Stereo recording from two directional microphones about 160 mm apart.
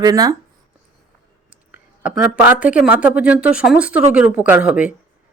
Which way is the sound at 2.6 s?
10° right (ahead or behind).